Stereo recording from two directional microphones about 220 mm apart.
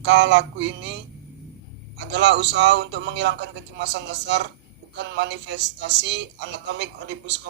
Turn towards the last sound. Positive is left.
turn(degrees=-55)  # may be behind; listen again after turning